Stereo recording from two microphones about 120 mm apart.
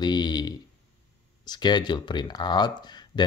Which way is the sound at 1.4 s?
35° left (ahead or behind).